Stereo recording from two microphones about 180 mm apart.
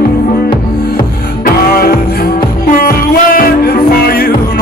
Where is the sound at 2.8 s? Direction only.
55° left (ahead or behind).